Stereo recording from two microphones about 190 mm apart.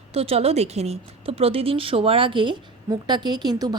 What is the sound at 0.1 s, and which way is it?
Speech, 30° right (ahead or behind).